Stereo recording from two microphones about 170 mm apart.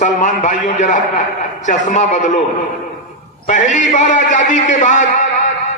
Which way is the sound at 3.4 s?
45° left (ahead or behind).